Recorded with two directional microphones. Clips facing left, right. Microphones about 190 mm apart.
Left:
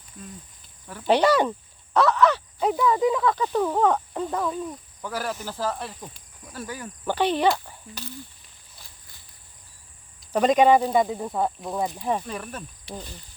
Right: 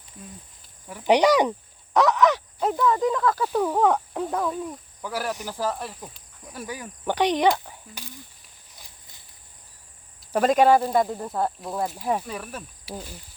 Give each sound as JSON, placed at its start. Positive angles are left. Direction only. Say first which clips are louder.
{"t": 0.9, "sound": "speech", "louder": "right 1 dB", "side_deg": -15}
{"t": 2.6, "sound": "speech", "louder": "left 3 dB", "side_deg": 0}
{"t": 10.2, "sound": "speech", "louder": "even", "side_deg": -5}